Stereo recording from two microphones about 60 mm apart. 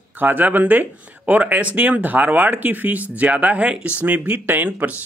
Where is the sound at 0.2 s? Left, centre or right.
Right.